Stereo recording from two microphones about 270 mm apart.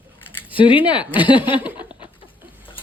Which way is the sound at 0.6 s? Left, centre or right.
Centre.